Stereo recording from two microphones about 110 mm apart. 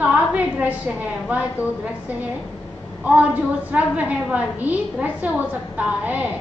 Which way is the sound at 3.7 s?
15° right (ahead or behind).